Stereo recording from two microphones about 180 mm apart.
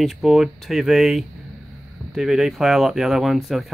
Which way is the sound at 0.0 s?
Centre (ahead or behind).